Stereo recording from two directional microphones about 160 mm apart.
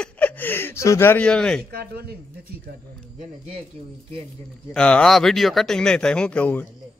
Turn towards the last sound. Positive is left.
turn(degrees=10)  # may be behind; listen again after turning